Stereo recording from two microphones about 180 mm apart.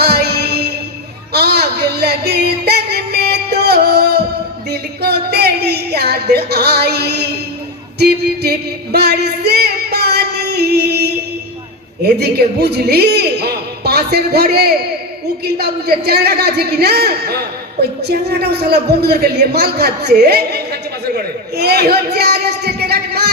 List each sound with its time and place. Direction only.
0.0 s music: 65° right (ahead or behind)
4.7 s a man's voice: 65° right (ahead or behind)
7.9 s music: 65° right (ahead or behind)
12.0 s a man's voice: 65° right (ahead or behind)
21.6 s a sound: 65° right (ahead or behind)